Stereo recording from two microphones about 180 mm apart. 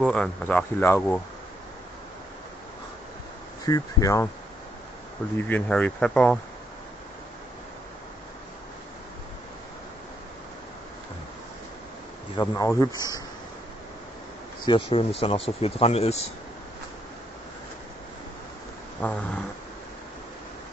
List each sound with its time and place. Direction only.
0.0 s speech: 5° left (ahead or behind)
3.6 s speech: 20° left (ahead or behind)
5.4 s speech: 10° left (ahead or behind)
12.4 s speech: 20° left (ahead or behind)
14.7 s speech: 30° left (ahead or behind)
18.9 s speech: 10° left (ahead or behind)